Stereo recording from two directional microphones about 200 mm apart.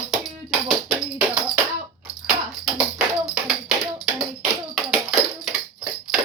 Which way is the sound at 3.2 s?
Centre (ahead or behind).